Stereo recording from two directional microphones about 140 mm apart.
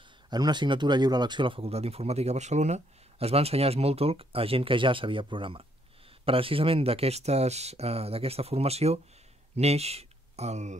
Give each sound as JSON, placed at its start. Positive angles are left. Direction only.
{"t": 0.3, "sound": "speech", "side_deg": -30}